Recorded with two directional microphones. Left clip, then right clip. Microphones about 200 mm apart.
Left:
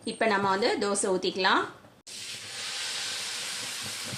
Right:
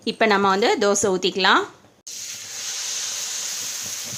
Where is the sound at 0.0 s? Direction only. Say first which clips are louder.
Right 8 dB; 40° right (ahead or behind).